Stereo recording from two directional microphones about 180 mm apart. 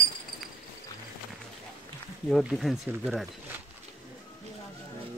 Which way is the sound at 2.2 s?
Centre (ahead or behind).